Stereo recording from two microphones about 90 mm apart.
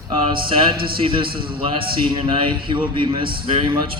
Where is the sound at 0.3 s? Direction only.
70° right (ahead or behind).